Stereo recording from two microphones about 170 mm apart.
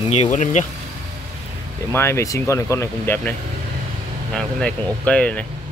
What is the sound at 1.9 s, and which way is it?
Speech, 15° left (ahead or behind).